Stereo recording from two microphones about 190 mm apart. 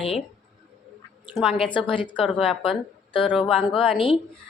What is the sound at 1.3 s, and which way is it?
Speech, centre (ahead or behind).